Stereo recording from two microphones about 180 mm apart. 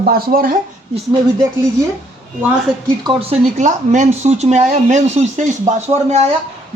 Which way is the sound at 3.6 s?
40° right (ahead or behind).